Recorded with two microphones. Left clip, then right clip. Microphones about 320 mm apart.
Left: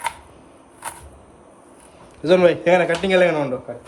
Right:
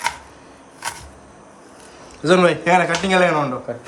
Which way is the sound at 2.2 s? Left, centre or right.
Centre.